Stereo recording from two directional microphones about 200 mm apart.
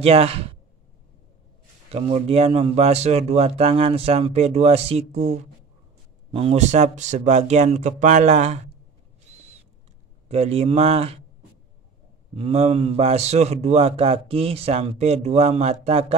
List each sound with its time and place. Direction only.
0.0 s speech: 30° right (ahead or behind)
1.9 s a man's voice: 30° right (ahead or behind)
10.2 s a man's voice: 30° right (ahead or behind)
12.4 s a man's voice: 30° right (ahead or behind)